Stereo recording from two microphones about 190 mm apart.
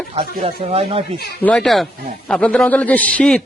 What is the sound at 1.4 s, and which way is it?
A man's voice, 5° left (ahead or behind).